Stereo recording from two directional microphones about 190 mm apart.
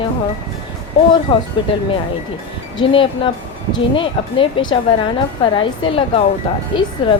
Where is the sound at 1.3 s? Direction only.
30° left (ahead or behind).